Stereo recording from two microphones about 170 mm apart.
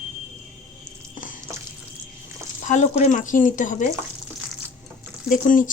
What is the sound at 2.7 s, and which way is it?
Speech, 45° left (ahead or behind).